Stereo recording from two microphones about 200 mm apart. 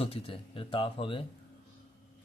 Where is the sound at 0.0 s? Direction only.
25° left (ahead or behind).